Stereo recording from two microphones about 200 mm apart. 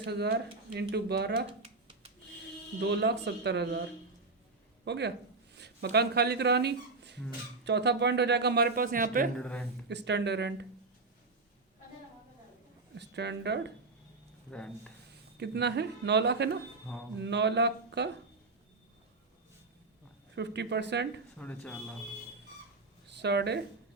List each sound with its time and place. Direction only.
0.0 s speech: 55° right (ahead or behind)
2.8 s speech: 60° right (ahead or behind)
4.9 s speech: 60° right (ahead or behind)
9.4 s speech: 5° left (ahead or behind)
9.9 s speech: 60° right (ahead or behind)
12.9 s speech: 60° right (ahead or behind)
14.5 s speech: 5° left (ahead or behind)
15.4 s speech: 55° right (ahead or behind)
20.3 s speech: 60° right (ahead or behind)
21.3 s speech: 5° left (ahead or behind)
23.2 s speech: 55° right (ahead or behind)